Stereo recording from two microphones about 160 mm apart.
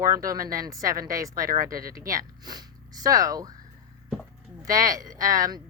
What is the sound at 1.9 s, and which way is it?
Speech, 20° right (ahead or behind).